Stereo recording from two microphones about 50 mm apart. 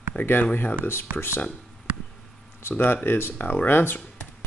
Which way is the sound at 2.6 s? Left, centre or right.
Left.